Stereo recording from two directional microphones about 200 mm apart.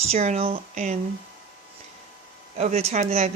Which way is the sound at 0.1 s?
35° right (ahead or behind).